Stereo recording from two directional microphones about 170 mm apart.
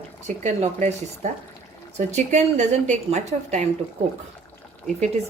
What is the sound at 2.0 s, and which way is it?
A woman's voice, 45° right (ahead or behind).